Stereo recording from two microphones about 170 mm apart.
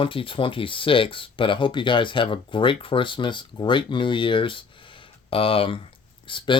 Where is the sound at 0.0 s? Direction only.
30° left (ahead or behind).